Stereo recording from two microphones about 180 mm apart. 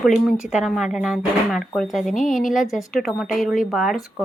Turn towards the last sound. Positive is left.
turn(degrees=0)  # may be behind; listen again after turning